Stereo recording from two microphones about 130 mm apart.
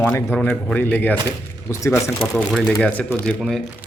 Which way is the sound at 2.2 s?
Centre (ahead or behind).